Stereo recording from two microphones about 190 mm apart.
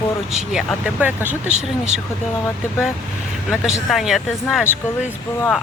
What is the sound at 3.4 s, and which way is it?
Speech, centre (ahead or behind).